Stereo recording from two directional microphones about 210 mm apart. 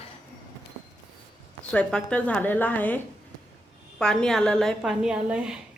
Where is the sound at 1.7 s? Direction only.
5° left (ahead or behind).